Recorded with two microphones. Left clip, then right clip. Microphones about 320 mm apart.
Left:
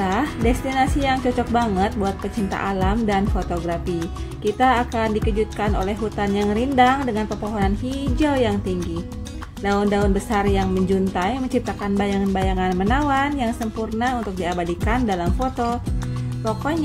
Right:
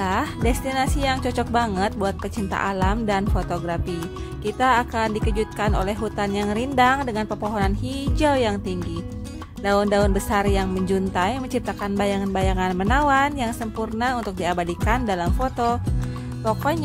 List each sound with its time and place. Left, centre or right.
0.0 s speech: right